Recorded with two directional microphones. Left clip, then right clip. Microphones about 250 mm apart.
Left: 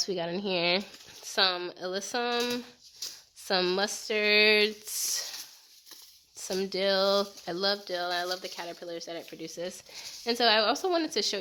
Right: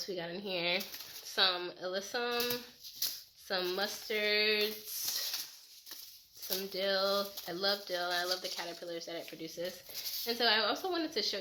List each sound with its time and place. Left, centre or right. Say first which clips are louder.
0.0 s speech: left 8 dB; left
6.6 s speech: left 6 dB; left